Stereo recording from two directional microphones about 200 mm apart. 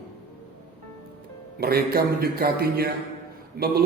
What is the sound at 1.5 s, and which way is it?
A man's voice, 50° right (ahead or behind).